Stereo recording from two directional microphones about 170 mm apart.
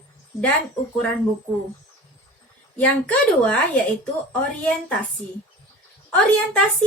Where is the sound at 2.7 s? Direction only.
10° left (ahead or behind).